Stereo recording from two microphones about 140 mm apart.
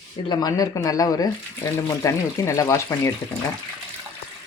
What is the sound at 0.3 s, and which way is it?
Speech, 30° left (ahead or behind).